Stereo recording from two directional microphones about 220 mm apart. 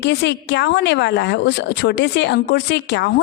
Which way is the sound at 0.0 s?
50° left (ahead or behind).